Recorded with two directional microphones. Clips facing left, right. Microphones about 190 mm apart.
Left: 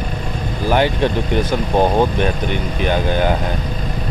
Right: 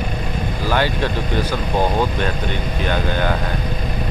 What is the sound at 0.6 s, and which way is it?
Speech, 20° left (ahead or behind).